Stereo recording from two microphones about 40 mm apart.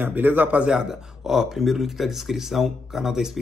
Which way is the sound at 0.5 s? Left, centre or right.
Right.